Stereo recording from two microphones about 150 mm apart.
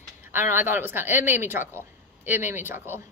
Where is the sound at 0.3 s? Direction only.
15° right (ahead or behind).